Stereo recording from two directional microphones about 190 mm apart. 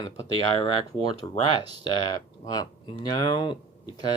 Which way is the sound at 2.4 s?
20° left (ahead or behind).